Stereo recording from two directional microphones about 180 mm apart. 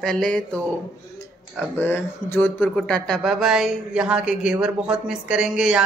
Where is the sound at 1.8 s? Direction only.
10° left (ahead or behind).